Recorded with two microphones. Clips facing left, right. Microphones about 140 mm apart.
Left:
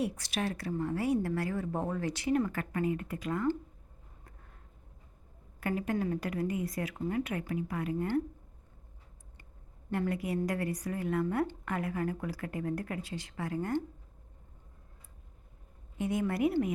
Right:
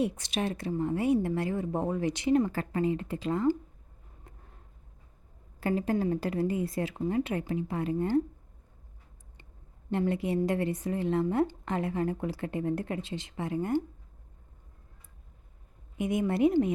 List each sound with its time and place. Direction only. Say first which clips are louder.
0.0 s speech: right 3 dB; 20° right (ahead or behind)
5.5 s speech: right 4 dB; 30° right (ahead or behind)
9.9 s speech: right 4 dB; 25° right (ahead or behind)
16.0 s speech: right 4 dB; 20° right (ahead or behind)